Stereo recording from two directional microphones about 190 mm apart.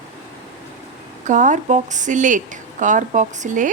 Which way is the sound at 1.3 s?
40° right (ahead or behind).